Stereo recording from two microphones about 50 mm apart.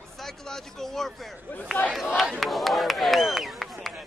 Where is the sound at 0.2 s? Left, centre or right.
Centre.